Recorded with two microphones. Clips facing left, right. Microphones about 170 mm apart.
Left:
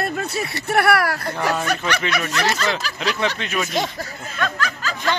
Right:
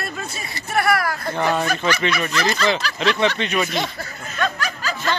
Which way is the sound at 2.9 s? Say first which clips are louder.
Right 4 dB; 5° left (ahead or behind).